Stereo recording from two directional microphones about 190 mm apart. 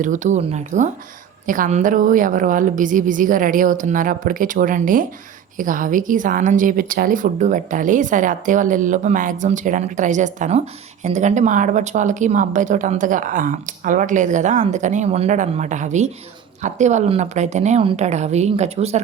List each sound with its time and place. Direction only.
0.0 s a woman's voice: 40° right (ahead or behind)